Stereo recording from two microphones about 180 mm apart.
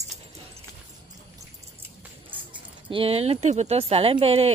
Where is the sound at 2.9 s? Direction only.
30° right (ahead or behind).